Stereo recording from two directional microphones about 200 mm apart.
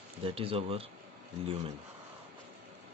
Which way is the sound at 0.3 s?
30° right (ahead or behind).